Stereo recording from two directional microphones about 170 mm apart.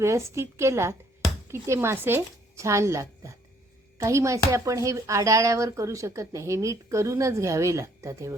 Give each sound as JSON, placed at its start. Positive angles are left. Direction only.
{"t": 0.0, "sound": "speech", "side_deg": -15}